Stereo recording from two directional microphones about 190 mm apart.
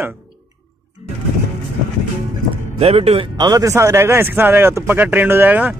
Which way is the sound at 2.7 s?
35° right (ahead or behind).